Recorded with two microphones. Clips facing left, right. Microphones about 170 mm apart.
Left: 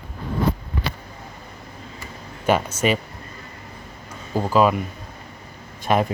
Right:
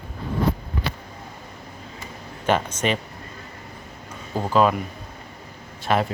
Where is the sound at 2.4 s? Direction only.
10° left (ahead or behind).